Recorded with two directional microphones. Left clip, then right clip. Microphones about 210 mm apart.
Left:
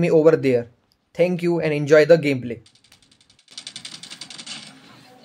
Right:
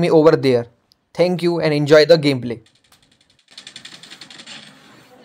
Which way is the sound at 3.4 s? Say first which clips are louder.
Left 1 dB; 40° left (ahead or behind).